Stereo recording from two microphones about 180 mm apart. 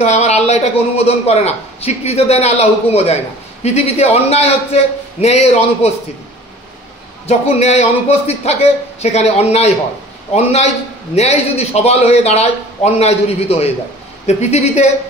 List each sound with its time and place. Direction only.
0.0 s a man's voice: 40° left (ahead or behind)
7.2 s a man's voice: 35° left (ahead or behind)